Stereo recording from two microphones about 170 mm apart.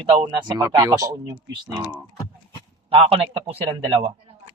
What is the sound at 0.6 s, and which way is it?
Speech, 15° right (ahead or behind).